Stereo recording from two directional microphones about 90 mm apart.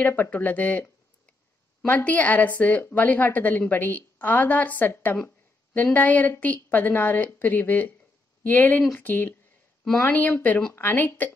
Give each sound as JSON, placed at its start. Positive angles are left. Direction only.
{"t": 0.0, "sound": "a woman's voice", "side_deg": 20}